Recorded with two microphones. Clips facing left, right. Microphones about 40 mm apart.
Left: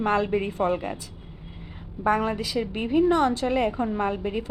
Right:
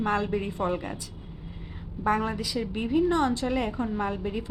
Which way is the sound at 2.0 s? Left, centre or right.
Left.